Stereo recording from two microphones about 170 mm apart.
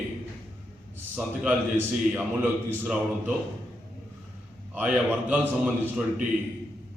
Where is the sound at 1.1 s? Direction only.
10° right (ahead or behind).